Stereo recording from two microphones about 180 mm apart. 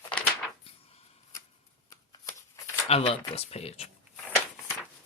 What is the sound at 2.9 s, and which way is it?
Speech, 30° left (ahead or behind).